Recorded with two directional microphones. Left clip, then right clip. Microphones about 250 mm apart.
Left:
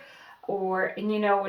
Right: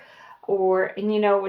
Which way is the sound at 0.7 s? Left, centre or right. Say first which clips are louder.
Right 3 dB; right.